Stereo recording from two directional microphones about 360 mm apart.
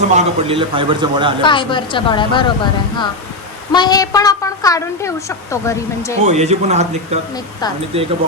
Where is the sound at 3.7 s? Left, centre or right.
Centre.